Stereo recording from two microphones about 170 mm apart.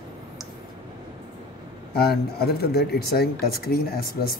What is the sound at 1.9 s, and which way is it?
Speech, 70° left (ahead or behind).